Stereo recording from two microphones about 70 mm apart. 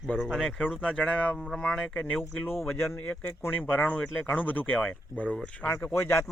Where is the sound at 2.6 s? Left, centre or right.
Left.